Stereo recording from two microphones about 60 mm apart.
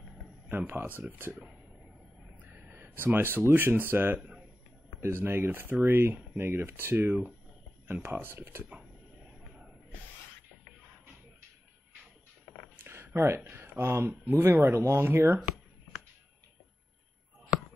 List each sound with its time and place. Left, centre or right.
0.5 s speech: right
1.3 s speech: centre
2.4 s speech: right
12.8 s a sound: right
13.6 s speech: right